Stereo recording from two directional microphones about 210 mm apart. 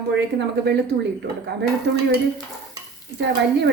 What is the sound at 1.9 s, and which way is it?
Dishes, 55° right (ahead or behind).